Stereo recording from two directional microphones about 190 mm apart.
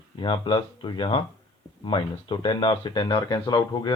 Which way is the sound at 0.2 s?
25° left (ahead or behind).